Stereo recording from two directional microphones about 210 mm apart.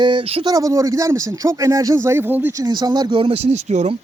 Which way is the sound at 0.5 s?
15° right (ahead or behind).